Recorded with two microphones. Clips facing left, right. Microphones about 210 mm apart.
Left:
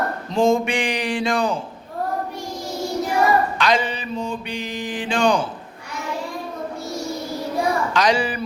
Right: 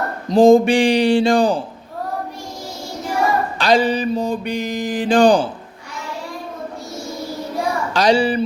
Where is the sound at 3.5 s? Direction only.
35° right (ahead or behind).